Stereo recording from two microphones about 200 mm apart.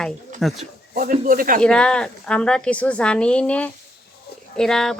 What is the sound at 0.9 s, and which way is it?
Speech, 45° right (ahead or behind).